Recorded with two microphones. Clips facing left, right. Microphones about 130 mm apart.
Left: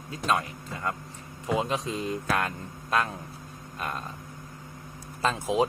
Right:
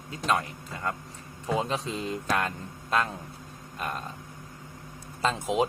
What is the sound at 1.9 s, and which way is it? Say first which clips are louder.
Mantra: even; 30° right (ahead or behind).